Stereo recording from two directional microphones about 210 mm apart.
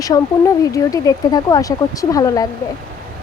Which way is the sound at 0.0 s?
15° left (ahead or behind).